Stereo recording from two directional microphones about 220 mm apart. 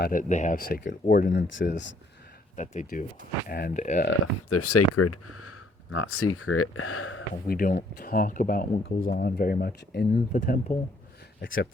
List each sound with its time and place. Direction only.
0.0 s speech: 40° left (ahead or behind); by 2.0 s 55° left (ahead or behind)
2.6 s speech: 35° left (ahead or behind)
4.4 s speech: 90° left; by 7.3 s 70° left (ahead or behind)
7.4 s speech: 40° left (ahead or behind)